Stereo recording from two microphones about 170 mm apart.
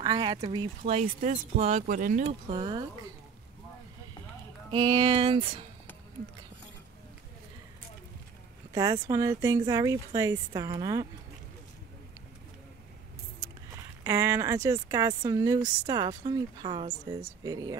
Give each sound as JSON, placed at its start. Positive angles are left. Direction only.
{"t": 0.0, "sound": "speech", "side_deg": -25}
{"t": 0.8, "sound": "speech", "side_deg": -40}
{"t": 2.2, "sound": "speech", "side_deg": -30}
{"t": 4.6, "sound": "speech", "side_deg": -25}
{"t": 8.7, "sound": "speech", "side_deg": -20}
{"t": 14.0, "sound": "speech", "side_deg": -15}